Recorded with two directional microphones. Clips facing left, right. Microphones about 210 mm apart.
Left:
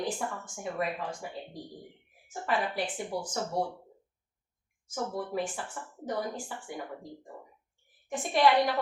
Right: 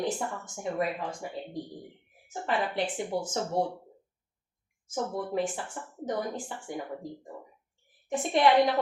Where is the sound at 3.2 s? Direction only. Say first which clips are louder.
Right 2 dB; 25° right (ahead or behind).